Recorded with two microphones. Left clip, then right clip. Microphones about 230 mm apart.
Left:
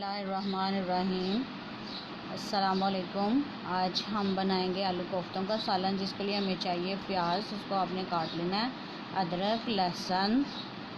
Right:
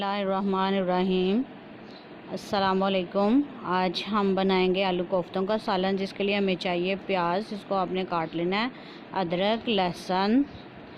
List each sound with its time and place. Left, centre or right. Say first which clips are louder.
0.0 s speech: right 7 dB; right
2.3 s speech: right 5 dB; right